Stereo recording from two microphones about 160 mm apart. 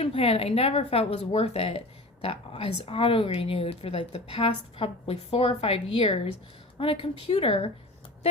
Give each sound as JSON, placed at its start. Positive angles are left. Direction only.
{"t": 0.0, "sound": "speech", "side_deg": 35}